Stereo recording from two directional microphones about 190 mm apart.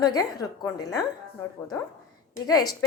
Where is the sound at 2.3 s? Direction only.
20° left (ahead or behind).